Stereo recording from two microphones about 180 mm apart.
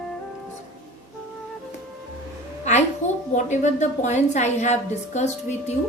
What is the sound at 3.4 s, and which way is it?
A woman's voice, 40° left (ahead or behind).